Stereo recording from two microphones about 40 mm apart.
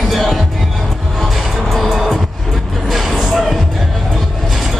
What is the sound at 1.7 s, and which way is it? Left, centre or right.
Music, centre.